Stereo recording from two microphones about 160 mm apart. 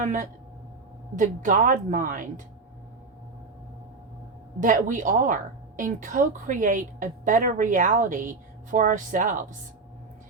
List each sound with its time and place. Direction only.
0.0 s a woman's voice: 55° right (ahead or behind)
4.6 s a woman's voice: 55° right (ahead or behind)